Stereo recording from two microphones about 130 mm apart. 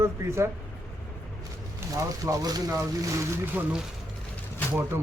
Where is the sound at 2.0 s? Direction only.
25° right (ahead or behind).